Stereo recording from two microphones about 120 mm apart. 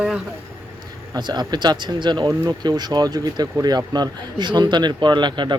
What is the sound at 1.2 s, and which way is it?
Speech, 35° right (ahead or behind).